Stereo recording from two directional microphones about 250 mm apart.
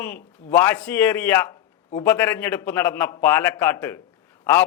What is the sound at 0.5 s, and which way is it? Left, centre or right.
A man's voice, centre.